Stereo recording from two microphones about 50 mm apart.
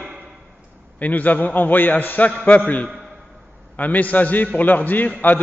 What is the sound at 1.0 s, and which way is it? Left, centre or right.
A man's voice, left.